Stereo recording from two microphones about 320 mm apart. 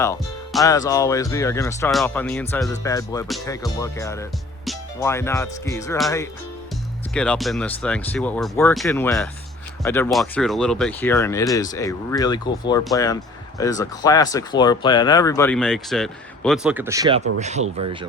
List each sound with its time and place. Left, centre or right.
0.0 s speech: centre
17.6 s speech: right